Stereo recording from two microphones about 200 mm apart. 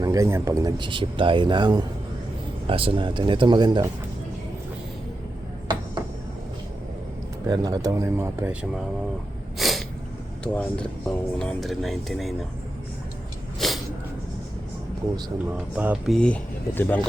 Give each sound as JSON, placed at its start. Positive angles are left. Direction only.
{"t": 0.0, "sound": "a man's voice", "side_deg": -15}
{"t": 7.4, "sound": "speech", "side_deg": -20}
{"t": 9.6, "sound": "sneeze", "side_deg": 0}
{"t": 10.4, "sound": "speech", "side_deg": 5}
{"t": 13.6, "sound": "a sound", "side_deg": 0}
{"t": 15.5, "sound": "speech", "side_deg": -5}